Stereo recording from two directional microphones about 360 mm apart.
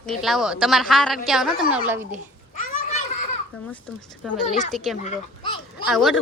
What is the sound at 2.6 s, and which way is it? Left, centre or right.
Children playing, centre.